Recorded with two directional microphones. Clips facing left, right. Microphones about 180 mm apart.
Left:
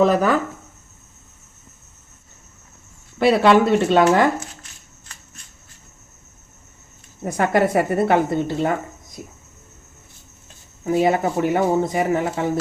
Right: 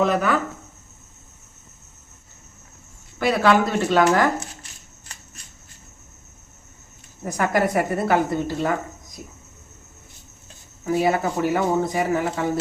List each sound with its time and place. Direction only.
0.0 s speech: 35° left (ahead or behind)
3.2 s speech: 25° left (ahead or behind)
7.3 s speech: 25° left (ahead or behind)
10.8 s speech: 25° left (ahead or behind)